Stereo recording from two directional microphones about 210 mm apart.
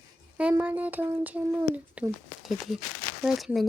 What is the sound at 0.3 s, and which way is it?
Speech, 5° right (ahead or behind).